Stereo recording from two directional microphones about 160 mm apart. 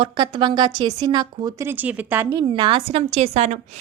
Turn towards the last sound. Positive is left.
turn(degrees=-40)  # may be behind; listen again after turning